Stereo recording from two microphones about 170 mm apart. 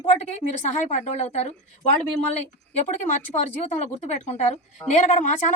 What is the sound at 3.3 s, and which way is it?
A woman's voice, 40° left (ahead or behind).